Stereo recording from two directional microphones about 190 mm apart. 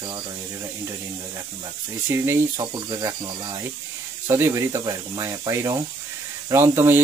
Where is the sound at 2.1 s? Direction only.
15° right (ahead or behind).